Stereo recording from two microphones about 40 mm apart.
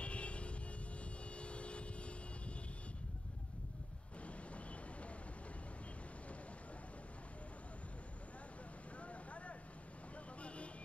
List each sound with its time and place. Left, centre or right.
0.0 s music: left
1.3 s vehicle: left
9.0 s vehicle: left